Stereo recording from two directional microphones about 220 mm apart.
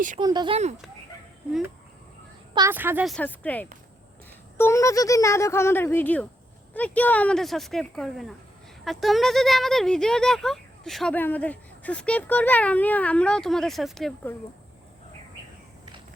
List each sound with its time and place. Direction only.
0.2 s speech: 20° right (ahead or behind)
2.6 s speech: 10° right (ahead or behind)